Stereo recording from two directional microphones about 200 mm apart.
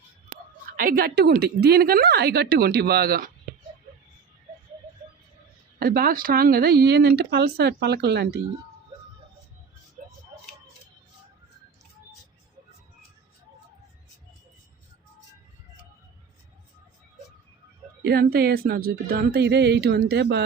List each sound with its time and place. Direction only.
0.8 s speech: 45° right (ahead or behind)
5.8 s speech: 45° right (ahead or behind)
18.0 s speech: 50° right (ahead or behind)